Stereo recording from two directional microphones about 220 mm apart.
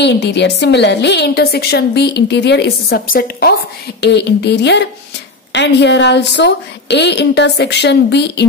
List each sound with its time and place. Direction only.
0.0 s a woman's voice: 50° left (ahead or behind)